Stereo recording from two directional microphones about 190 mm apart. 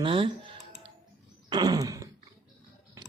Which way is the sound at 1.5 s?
20° right (ahead or behind).